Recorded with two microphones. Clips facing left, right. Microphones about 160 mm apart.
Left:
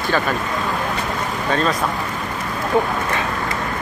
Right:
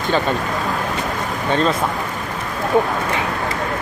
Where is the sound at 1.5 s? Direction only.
25° right (ahead or behind).